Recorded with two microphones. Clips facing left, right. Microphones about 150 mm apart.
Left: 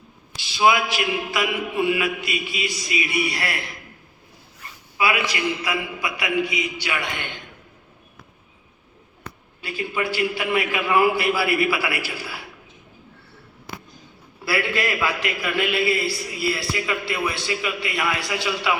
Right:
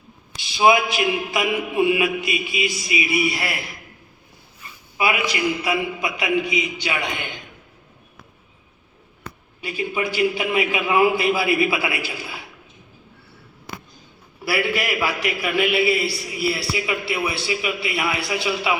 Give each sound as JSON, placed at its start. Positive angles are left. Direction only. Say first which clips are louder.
{"t": 0.5, "sound": "a man's voice", "louder": "right 2 dB", "side_deg": -20}
{"t": 4.9, "sound": "a man's voice", "louder": "right 1 dB", "side_deg": -25}
{"t": 9.6, "sound": "a man's voice", "louder": "right 2 dB", "side_deg": -15}
{"t": 14.5, "sound": "a man's voice", "louder": "right 1 dB", "side_deg": -10}